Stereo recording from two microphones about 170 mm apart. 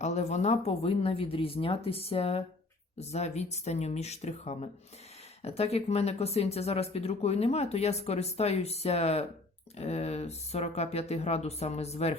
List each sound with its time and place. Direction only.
0.0 s speech: 40° left (ahead or behind)